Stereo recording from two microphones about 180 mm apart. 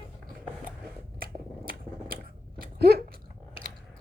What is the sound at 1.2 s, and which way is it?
Scissors, 55° right (ahead or behind).